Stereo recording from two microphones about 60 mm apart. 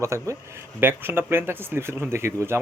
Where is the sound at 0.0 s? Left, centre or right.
Right.